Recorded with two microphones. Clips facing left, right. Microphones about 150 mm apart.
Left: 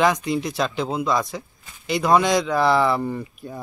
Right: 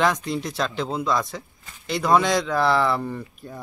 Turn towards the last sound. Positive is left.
turn(degrees=5)  # may be behind; listen again after turning